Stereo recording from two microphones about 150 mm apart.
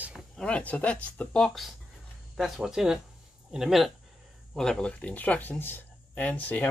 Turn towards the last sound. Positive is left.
turn(degrees=10)  # may be behind; listen again after turning